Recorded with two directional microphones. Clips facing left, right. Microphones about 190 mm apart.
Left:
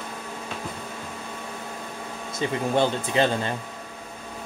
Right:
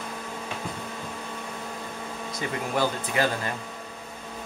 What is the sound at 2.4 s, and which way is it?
Speech, 25° left (ahead or behind).